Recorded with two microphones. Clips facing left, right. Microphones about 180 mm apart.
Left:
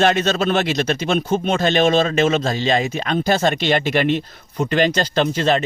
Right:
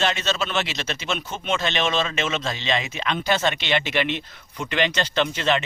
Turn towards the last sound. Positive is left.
turn(degrees=40)  # may be behind; listen again after turning